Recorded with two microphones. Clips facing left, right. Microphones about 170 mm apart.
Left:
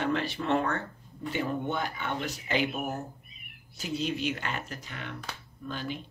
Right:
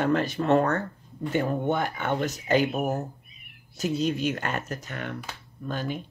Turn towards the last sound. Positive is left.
turn(degrees=-45)  # may be behind; listen again after turning